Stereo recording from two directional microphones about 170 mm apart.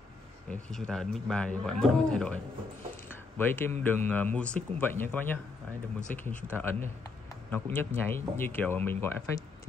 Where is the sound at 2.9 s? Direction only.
10° left (ahead or behind).